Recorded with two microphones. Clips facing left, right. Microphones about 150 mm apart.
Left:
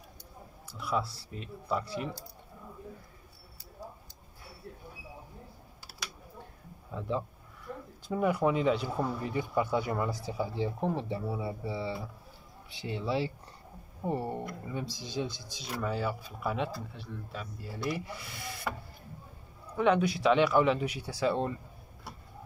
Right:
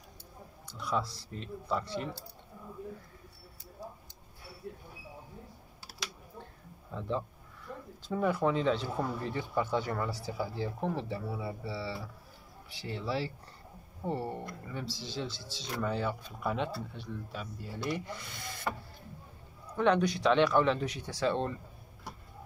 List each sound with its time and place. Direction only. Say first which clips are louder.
0.7 s speech: left 1 dB; 5° left (ahead or behind)
6.9 s speech: left 1 dB; 5° left (ahead or behind)
19.8 s speech: left 1 dB; 5° left (ahead or behind)